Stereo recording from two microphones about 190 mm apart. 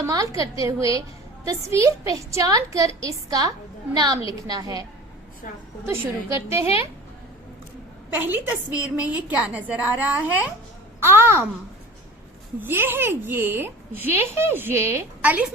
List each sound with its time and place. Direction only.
0.0 s a woman's voice: 15° right (ahead or behind)
5.9 s a woman's voice: 15° right (ahead or behind)
8.1 s a woman's voice: 10° right (ahead or behind)
12.5 s a woman's voice: 10° right (ahead or behind)